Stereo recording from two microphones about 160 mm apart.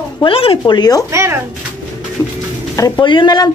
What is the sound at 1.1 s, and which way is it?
Speech, 20° right (ahead or behind).